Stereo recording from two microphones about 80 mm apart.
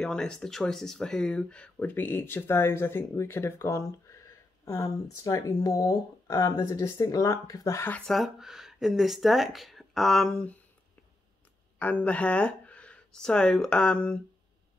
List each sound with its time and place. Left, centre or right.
0.0 s speech: centre
1.8 s speech: left
8.1 s speech: centre
11.8 s speech: centre